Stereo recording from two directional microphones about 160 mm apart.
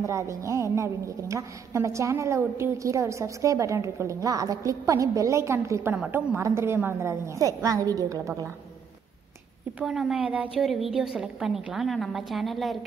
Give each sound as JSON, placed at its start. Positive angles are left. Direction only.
{"t": 0.0, "sound": "a woman's voice", "side_deg": -20}
{"t": 9.8, "sound": "a woman's voice", "side_deg": -5}